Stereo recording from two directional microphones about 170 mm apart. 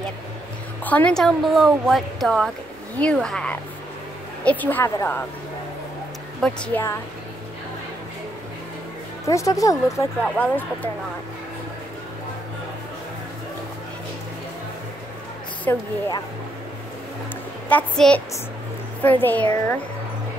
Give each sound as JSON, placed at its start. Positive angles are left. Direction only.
{"t": 0.8, "sound": "a woman's voice", "side_deg": 10}
{"t": 6.4, "sound": "a woman's voice", "side_deg": 10}
{"t": 9.2, "sound": "speech", "side_deg": 20}
{"t": 10.2, "sound": "a woman's voice", "side_deg": 10}
{"t": 15.7, "sound": "a woman's voice", "side_deg": 15}
{"t": 17.6, "sound": "a woman's voice", "side_deg": 5}